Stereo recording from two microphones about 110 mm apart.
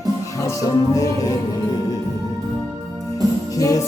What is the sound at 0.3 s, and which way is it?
Music, 30° left (ahead or behind).